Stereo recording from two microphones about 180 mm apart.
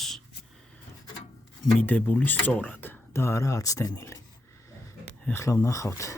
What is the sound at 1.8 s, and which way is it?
Speech, 10° left (ahead or behind).